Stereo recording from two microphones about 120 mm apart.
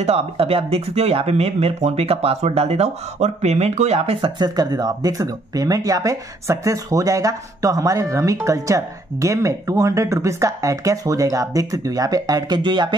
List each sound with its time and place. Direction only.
0.0 s speech: 55° right (ahead or behind)
4.2 s speech: 35° right (ahead or behind)